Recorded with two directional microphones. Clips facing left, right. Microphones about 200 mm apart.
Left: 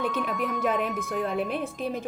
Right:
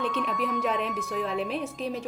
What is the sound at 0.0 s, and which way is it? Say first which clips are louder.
Speech: left 1 dB; 5° left (ahead or behind).